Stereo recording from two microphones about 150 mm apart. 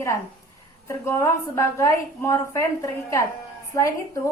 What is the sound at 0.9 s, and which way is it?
A woman's voice, 20° left (ahead or behind).